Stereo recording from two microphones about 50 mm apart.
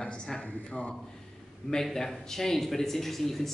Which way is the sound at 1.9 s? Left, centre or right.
Centre.